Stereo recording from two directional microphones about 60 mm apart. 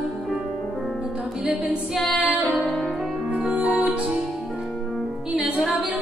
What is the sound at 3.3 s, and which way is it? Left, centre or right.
Music, centre.